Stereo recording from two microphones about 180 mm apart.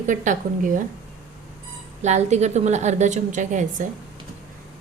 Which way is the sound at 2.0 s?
40° right (ahead or behind).